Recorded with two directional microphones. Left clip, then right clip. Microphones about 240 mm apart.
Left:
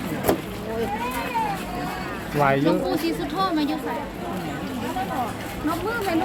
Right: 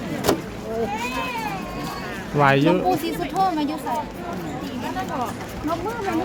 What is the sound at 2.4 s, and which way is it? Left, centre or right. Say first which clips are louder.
Speech: right 3 dB; centre.